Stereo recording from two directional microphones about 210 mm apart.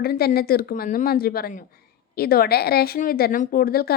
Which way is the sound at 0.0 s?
45° left (ahead or behind).